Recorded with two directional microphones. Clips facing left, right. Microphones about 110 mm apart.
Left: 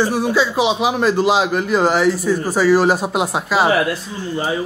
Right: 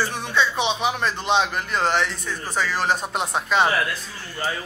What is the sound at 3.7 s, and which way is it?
Speech, 25° left (ahead or behind).